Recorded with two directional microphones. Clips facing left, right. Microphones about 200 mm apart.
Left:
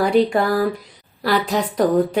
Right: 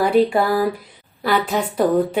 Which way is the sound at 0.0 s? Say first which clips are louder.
Even; 5° right (ahead or behind).